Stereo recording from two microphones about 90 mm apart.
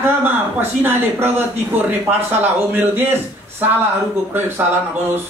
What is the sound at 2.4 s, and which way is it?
Speech, 20° right (ahead or behind).